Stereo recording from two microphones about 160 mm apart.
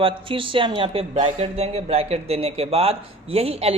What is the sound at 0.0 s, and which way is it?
Speech, 35° right (ahead or behind).